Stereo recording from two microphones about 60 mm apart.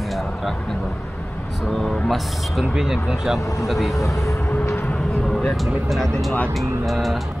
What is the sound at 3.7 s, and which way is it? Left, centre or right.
Speech, centre.